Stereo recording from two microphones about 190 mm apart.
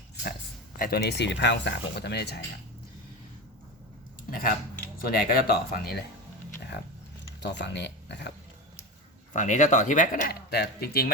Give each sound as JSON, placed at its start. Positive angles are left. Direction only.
{"t": 0.8, "sound": "speech", "side_deg": 55}
{"t": 4.3, "sound": "a sound", "side_deg": 50}
{"t": 4.9, "sound": "speech", "side_deg": 50}
{"t": 7.4, "sound": "speech", "side_deg": 65}
{"t": 9.3, "sound": "speech", "side_deg": 40}